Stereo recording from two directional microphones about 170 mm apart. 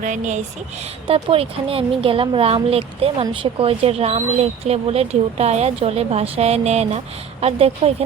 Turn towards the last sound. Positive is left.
turn(degrees=-35)  # may be behind; listen again after turning